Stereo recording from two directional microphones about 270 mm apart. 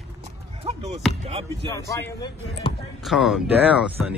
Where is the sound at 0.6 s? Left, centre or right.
Right.